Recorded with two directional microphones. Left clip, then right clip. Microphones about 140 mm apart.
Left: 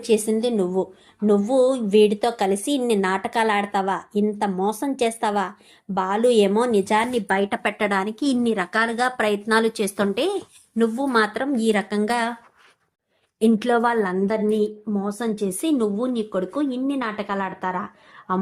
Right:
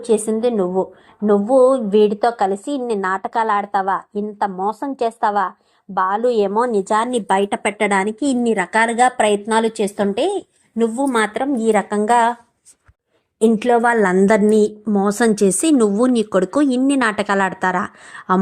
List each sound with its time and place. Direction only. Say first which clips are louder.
0.1 s a woman's voice: right 3 dB; 10° left (ahead or behind)
7.2 s a woman's voice: right 4 dB; 5° right (ahead or behind)
8.5 s a woman's voice: right 6 dB; 15° right (ahead or behind)
9.5 s a woman's voice: right 3 dB; 10° right (ahead or behind)
10.8 s a woman's voice: right 3 dB; 10° left (ahead or behind)
11.0 s a woman's voice: right 3 dB; 10° right (ahead or behind)
11.5 s a woman's voice: right 5 dB; 10° left (ahead or behind)
13.4 s a woman's voice: right 5 dB; 10° right (ahead or behind)
14.0 s a woman's voice: right 9 dB; 50° right (ahead or behind)
14.8 s speech: right 10 dB; 65° right (ahead or behind)
15.4 s speech: right 8 dB; 40° right (ahead or behind)